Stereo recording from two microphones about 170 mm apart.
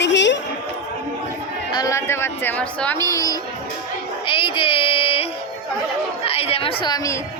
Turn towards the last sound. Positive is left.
turn(degrees=20)  # may be behind; listen again after turning